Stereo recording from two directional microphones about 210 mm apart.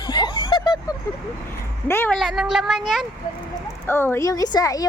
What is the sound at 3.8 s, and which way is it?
Speech, 10° left (ahead or behind).